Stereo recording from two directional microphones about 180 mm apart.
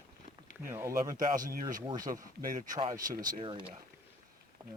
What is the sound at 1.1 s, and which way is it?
Speech, 50° right (ahead or behind).